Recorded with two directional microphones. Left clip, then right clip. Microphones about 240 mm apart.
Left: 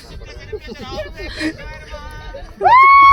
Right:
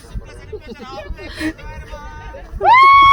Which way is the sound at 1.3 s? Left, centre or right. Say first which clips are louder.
Even; centre.